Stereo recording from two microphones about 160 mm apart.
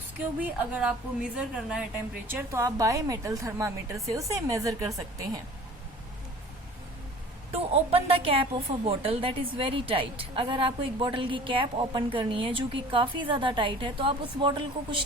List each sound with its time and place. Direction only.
0.2 s a woman's voice: 10° right (ahead or behind)
7.5 s a woman's voice: 40° right (ahead or behind)